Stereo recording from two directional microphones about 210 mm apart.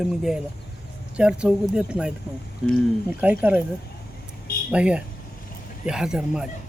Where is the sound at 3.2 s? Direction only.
10° right (ahead or behind).